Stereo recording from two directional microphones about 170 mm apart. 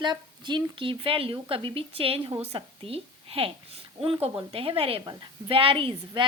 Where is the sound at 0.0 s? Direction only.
25° right (ahead or behind).